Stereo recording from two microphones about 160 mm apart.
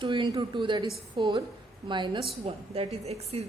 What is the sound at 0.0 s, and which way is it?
A woman's voice, 30° right (ahead or behind).